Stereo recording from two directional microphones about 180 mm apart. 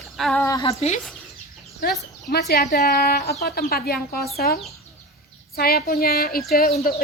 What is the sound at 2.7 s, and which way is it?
Speech, 40° left (ahead or behind).